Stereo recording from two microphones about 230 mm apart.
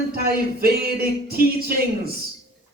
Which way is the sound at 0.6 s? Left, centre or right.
Right.